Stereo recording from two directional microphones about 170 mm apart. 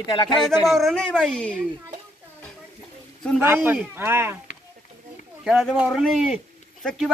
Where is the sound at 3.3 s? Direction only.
15° right (ahead or behind).